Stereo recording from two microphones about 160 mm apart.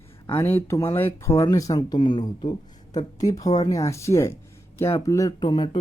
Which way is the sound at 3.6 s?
20° left (ahead or behind).